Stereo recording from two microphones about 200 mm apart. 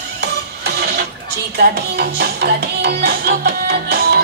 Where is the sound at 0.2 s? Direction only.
55° right (ahead or behind).